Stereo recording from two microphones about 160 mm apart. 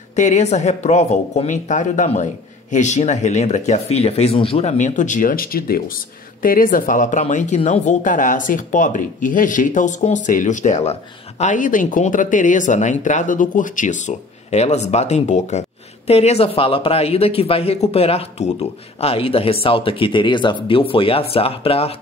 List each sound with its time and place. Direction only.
0.1 s speech: 50° left (ahead or behind)